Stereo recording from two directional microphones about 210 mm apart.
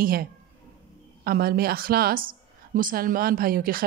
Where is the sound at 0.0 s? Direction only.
45° right (ahead or behind).